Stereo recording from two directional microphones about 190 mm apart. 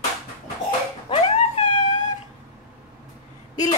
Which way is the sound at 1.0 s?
30° left (ahead or behind).